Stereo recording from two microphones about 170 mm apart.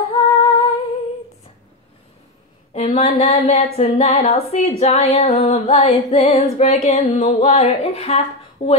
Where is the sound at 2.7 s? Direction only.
35° left (ahead or behind).